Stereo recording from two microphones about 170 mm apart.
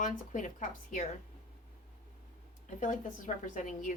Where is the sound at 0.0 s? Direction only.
50° left (ahead or behind).